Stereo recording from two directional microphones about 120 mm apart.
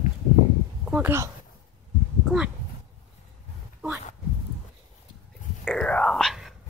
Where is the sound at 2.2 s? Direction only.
5° right (ahead or behind).